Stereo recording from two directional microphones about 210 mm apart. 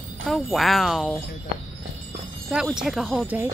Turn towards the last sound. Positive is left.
turn(degrees=-10)  # may be behind; listen again after turning